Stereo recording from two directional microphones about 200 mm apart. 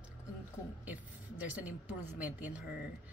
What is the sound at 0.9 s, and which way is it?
A woman's voice, 5° right (ahead or behind).